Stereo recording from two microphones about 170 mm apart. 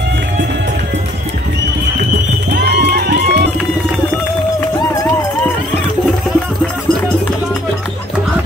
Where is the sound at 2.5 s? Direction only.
80° right.